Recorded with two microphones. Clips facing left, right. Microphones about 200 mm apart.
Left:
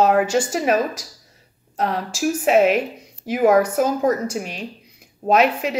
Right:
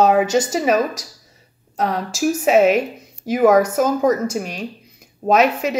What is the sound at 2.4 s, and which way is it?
A woman's voice, 45° right (ahead or behind).